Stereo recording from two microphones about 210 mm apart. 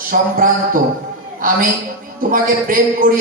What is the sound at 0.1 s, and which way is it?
Speech, 40° right (ahead or behind).